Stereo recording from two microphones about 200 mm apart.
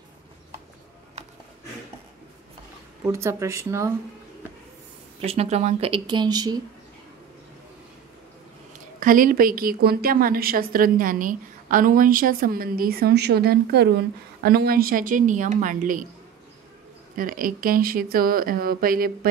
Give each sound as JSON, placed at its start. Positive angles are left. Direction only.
{"t": 3.1, "sound": "speech", "side_deg": -15}
{"t": 5.2, "sound": "speech", "side_deg": -30}
{"t": 9.0, "sound": "a woman's voice", "side_deg": -45}
{"t": 17.1, "sound": "a woman's voice", "side_deg": -45}